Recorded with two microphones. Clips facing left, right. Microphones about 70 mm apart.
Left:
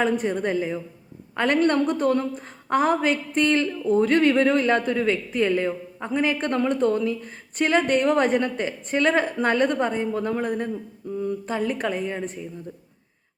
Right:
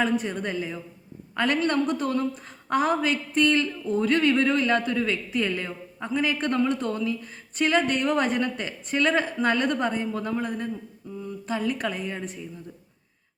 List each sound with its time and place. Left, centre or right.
0.0 s a man's voice: left